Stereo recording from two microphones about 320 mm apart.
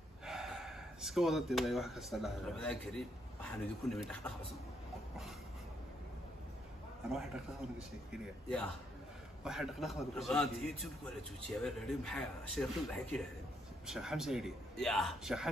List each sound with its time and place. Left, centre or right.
0.2 s speech: centre
7.1 s a man's voice: centre